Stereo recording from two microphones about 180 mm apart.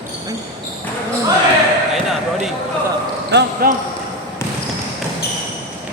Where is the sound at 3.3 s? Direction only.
55° right (ahead or behind).